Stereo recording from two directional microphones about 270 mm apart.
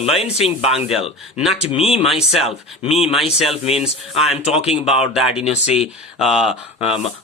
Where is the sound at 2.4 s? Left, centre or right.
Left.